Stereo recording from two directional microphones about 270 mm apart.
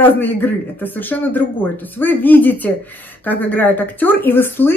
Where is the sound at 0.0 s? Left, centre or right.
Centre.